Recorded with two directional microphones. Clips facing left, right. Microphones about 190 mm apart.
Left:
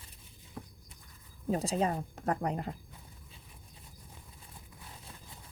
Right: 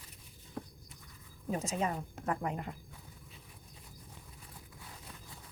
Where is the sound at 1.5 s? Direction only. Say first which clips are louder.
Left 4 dB; 35° left (ahead or behind).